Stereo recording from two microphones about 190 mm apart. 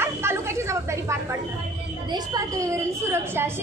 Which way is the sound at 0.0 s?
15° right (ahead or behind).